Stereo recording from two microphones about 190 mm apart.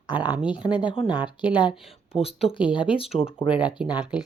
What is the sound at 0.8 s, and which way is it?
Speech, 25° left (ahead or behind).